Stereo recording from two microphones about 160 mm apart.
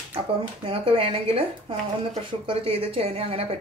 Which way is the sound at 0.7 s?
35° right (ahead or behind).